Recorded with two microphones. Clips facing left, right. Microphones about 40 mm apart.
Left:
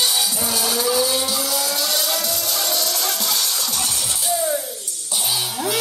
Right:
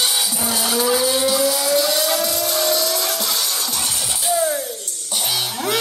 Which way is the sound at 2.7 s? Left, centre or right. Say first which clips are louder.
Right 3 dB; right.